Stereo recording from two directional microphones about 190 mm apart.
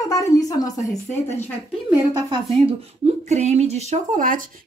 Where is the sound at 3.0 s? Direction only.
35° right (ahead or behind).